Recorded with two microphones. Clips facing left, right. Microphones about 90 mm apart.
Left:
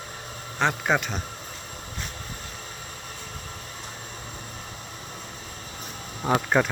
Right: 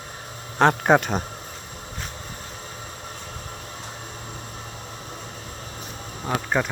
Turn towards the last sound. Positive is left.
turn(degrees=0)  # may be behind; listen again after turning